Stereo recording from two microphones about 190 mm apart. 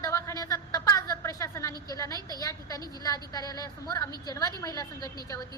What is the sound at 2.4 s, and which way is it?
A woman's voice, 15° left (ahead or behind).